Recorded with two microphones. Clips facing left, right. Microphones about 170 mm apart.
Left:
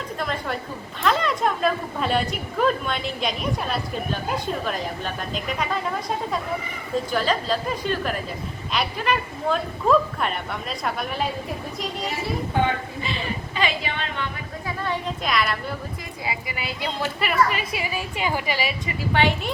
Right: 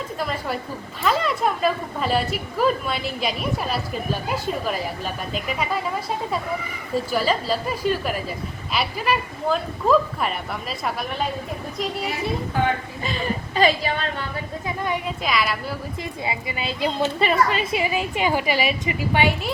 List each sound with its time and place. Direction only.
0.2 s a woman's voice: 5° right (ahead or behind)
13.0 s a woman's voice: 40° right (ahead or behind)
14.8 s a woman's voice: 10° right (ahead or behind)
15.2 s a woman's voice: centre (ahead or behind)
16.2 s a woman's voice: 25° right (ahead or behind)